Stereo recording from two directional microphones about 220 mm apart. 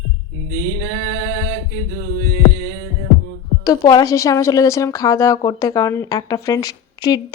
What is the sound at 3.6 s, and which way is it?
A woman's voice, 15° left (ahead or behind).